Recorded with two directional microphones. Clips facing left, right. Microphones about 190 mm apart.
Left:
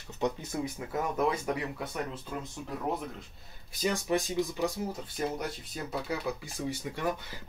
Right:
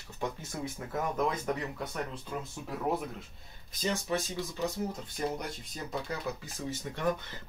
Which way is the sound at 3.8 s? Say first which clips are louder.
Left 3 dB; 15° left (ahead or behind).